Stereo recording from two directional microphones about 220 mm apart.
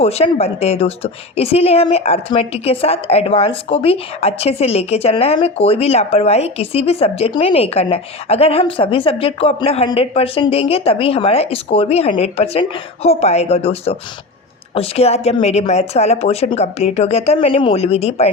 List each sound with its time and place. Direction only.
0.0 s a woman's voice: 25° left (ahead or behind)